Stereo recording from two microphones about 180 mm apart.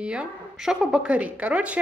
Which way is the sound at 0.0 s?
5° right (ahead or behind).